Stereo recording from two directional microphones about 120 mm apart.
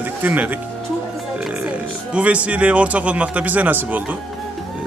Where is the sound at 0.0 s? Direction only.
15° right (ahead or behind).